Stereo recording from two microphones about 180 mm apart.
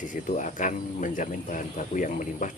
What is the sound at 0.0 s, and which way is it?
Speech, 45° left (ahead or behind).